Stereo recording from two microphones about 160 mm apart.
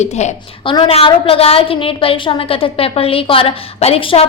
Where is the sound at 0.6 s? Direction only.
30° left (ahead or behind).